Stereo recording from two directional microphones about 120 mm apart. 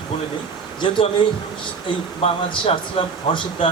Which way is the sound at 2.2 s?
50° left (ahead or behind).